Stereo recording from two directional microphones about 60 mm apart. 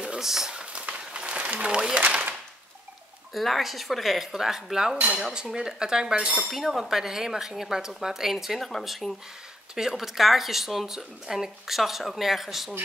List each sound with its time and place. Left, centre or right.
0.2 s a sound: centre
2.0 s speech: right
3.3 s speech: centre
4.9 s dishes: right
5.2 s cutlery: centre
6.5 s speech: centre